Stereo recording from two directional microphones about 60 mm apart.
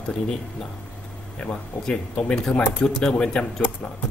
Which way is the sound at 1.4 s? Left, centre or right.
Centre.